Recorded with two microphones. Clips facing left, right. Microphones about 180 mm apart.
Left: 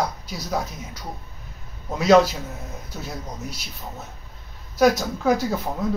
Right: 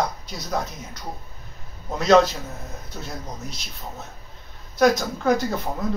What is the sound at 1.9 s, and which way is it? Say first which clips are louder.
Speech: left 1 dB; 5° left (ahead or behind).